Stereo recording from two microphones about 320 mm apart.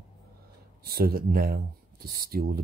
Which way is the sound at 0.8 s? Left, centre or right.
Right.